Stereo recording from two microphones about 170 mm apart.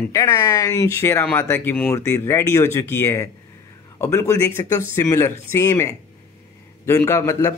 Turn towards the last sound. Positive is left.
turn(degrees=15)  # may be behind; listen again after turning